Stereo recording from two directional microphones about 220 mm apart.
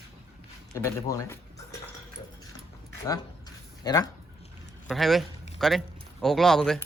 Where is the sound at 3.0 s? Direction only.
15° left (ahead or behind).